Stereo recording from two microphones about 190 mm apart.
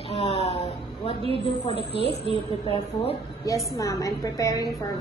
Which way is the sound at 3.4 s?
15° left (ahead or behind).